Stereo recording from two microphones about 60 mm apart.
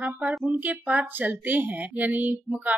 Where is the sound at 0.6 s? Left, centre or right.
Right.